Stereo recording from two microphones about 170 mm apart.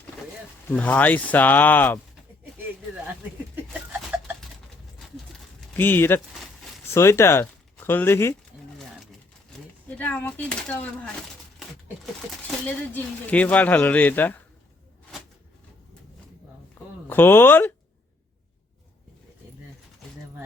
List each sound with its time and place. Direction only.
0.7 s speech: 10° left (ahead or behind)
3.5 s a sound: 10° right (ahead or behind)
5.0 s pigeon: centre (ahead or behind)
5.7 s speech: 10° left (ahead or behind)
10.0 s speech: 10° left (ahead or behind)
12.3 s a sound: centre (ahead or behind)
12.9 s speech: 10° left (ahead or behind)
17.1 s speech: 10° left (ahead or behind)